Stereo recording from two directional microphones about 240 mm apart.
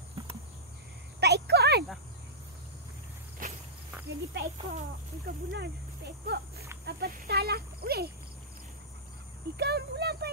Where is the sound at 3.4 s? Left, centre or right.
Right.